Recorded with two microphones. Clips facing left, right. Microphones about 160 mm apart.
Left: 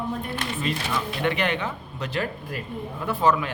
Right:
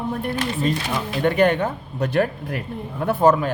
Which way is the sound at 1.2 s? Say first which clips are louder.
Right 9 dB; 45° right (ahead or behind).